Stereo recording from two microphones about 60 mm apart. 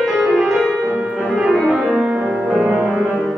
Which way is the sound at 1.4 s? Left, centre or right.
Centre.